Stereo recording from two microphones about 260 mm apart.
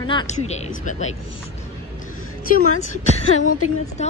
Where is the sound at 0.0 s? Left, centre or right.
Centre.